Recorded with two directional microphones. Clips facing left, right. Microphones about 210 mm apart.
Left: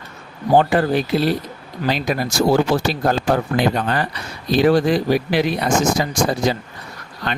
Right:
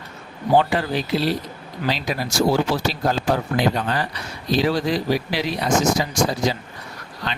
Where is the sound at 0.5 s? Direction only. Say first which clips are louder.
Left 4 dB; 50° left (ahead or behind).